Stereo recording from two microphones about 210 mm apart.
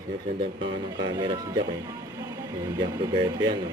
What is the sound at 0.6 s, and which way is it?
Speech, 20° right (ahead or behind).